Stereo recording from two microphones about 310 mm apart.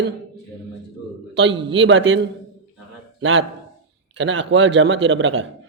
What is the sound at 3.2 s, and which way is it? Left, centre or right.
Speech, right.